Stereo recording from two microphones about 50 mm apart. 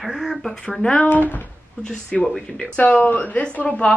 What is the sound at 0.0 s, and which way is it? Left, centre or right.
Speech, centre.